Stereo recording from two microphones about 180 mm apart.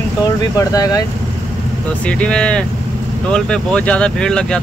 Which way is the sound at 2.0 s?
5° left (ahead or behind).